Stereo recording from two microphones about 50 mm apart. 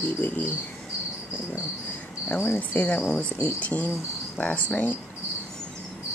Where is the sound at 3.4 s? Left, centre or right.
Left.